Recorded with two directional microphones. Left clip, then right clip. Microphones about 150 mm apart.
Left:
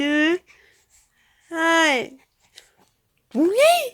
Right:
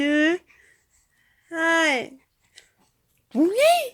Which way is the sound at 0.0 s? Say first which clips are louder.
Left 1 dB; 10° left (ahead or behind).